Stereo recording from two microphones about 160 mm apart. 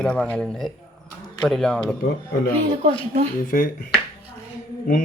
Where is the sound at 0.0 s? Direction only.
10° left (ahead or behind).